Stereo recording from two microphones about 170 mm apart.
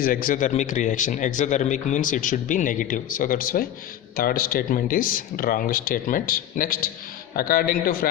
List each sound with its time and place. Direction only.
0.0 s speech: 55° left (ahead or behind)